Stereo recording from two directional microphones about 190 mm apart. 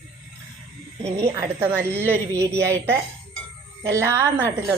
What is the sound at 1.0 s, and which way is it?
A woman's voice, 15° right (ahead or behind).